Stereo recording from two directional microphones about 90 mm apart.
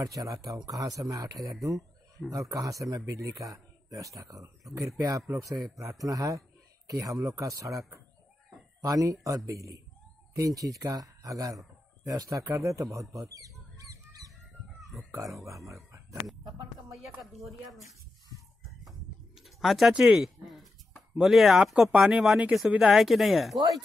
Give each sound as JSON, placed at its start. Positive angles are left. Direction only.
{"t": 0.0, "sound": "a man's voice", "side_deg": -40}
{"t": 8.8, "sound": "speech", "side_deg": -40}
{"t": 13.3, "sound": "goose", "side_deg": -40}
{"t": 14.8, "sound": "a sound", "side_deg": 0}
{"t": 15.3, "sound": "speech", "side_deg": -35}
{"t": 17.2, "sound": "speech", "side_deg": 0}
{"t": 18.9, "sound": "pigeon", "side_deg": 0}
{"t": 19.9, "sound": "speech", "side_deg": -10}